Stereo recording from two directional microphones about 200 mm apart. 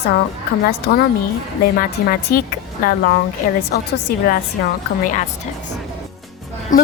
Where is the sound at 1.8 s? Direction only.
45° left (ahead or behind).